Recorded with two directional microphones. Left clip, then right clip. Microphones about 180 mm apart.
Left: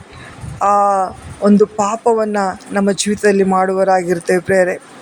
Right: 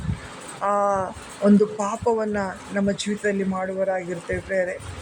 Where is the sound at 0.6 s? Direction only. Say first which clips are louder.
Left 9 dB; 5° left (ahead or behind).